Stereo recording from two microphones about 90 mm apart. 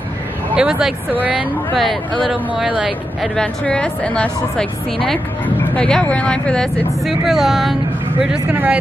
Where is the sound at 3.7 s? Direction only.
15° left (ahead or behind).